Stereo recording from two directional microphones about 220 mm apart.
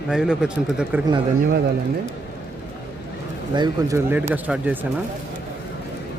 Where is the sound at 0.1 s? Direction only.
5° right (ahead or behind).